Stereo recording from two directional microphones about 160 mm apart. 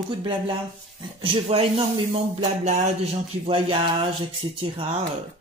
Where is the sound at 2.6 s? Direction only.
50° right (ahead or behind).